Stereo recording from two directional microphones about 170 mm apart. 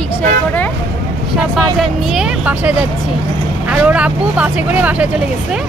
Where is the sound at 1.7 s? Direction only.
5° right (ahead or behind).